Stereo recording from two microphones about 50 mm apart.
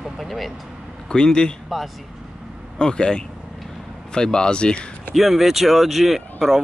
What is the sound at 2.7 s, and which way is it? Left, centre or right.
Speech, centre.